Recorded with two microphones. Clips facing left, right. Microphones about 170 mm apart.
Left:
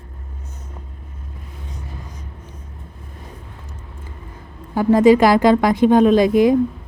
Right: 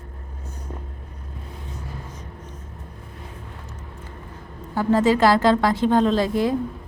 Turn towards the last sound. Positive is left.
turn(degrees=15)  # may be behind; listen again after turning